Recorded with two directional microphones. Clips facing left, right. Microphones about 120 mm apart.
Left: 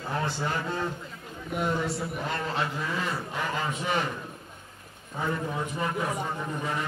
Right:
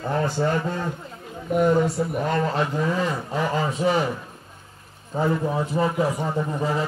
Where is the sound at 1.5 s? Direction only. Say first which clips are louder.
Right 9 dB; 45° right (ahead or behind).